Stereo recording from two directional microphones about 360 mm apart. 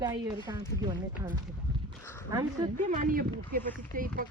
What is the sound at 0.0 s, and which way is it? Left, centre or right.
A woman's voice, centre.